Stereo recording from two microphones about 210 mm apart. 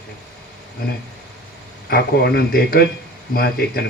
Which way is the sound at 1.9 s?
50° left (ahead or behind).